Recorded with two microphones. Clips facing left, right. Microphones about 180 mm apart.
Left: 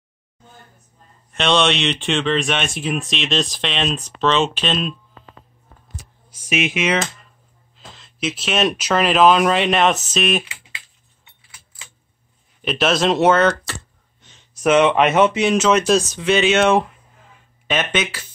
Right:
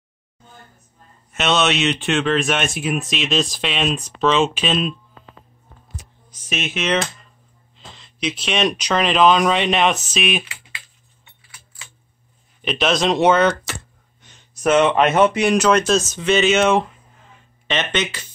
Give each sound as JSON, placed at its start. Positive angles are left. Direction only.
{"t": 1.3, "sound": "speech", "side_deg": -5}
{"t": 6.3, "sound": "speech", "side_deg": 10}
{"t": 10.4, "sound": "typing", "side_deg": 20}
{"t": 12.6, "sound": "speech", "side_deg": 5}
{"t": 13.4, "sound": "speech", "side_deg": -10}
{"t": 14.6, "sound": "speech", "side_deg": 5}